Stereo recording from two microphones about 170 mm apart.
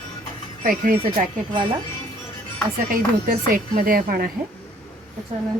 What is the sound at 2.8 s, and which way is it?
Speech, 55° right (ahead or behind).